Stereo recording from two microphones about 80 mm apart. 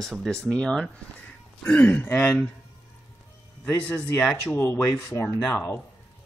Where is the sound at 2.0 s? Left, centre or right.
Left.